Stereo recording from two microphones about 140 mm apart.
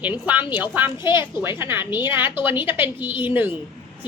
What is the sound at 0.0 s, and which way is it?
A woman's voice, 10° right (ahead or behind).